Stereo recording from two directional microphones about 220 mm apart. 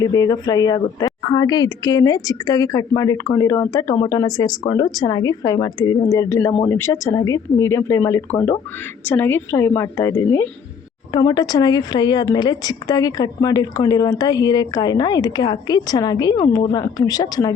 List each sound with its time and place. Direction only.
0.0 s a woman's voice: 15° left (ahead or behind)